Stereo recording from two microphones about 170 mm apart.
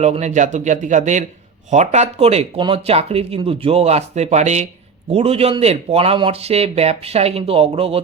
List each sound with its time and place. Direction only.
0.0 s speech: 40° right (ahead or behind)